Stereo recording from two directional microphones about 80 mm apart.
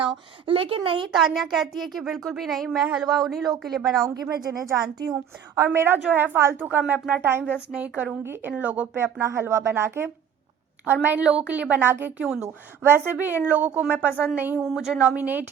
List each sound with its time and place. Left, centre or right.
0.4 s speech: right
1.1 s speech: centre
4.1 s speech: right
5.5 s a woman's voice: right
7.7 s a woman's voice: centre
8.2 s a woman's voice: right
8.5 s a woman's voice: centre
9.1 s a woman's voice: right
14.6 s speech: centre
15.0 s a woman's voice: centre